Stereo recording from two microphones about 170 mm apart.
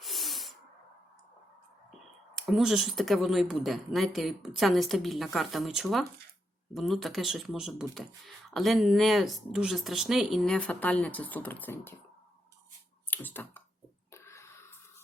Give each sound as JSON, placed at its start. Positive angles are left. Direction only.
{"t": 0.0, "sound": "hiss", "side_deg": 0}
{"t": 1.9, "sound": "speech", "side_deg": 0}
{"t": 13.1, "sound": "computer keyboard", "side_deg": 10}
{"t": 14.1, "sound": "a sound", "side_deg": 15}